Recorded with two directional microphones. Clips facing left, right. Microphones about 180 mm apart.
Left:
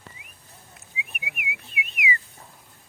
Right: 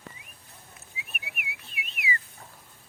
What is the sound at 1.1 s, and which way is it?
Whistling, 15° left (ahead or behind).